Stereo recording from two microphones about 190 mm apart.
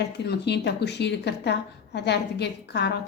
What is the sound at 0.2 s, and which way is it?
A woman's voice, 60° left (ahead or behind).